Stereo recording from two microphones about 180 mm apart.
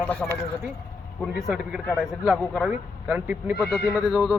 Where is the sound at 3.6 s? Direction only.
5° left (ahead or behind).